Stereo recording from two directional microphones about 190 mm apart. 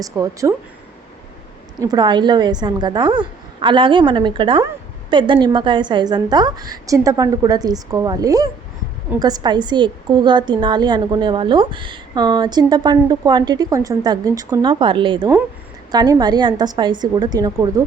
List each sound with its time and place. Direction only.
0.0 s a woman's voice: 15° right (ahead or behind)
1.8 s a woman's voice: 20° right (ahead or behind)